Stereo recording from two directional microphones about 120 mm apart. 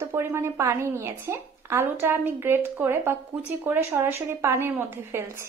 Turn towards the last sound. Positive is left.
turn(degrees=-20)  # may be behind; listen again after turning